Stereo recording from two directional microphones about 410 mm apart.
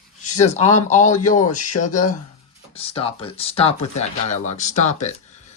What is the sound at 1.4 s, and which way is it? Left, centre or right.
Speech, left.